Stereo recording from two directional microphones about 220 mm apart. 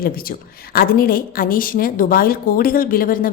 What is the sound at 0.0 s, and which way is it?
Speech, 40° left (ahead or behind).